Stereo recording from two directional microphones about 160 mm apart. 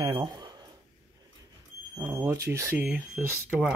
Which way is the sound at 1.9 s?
15° right (ahead or behind).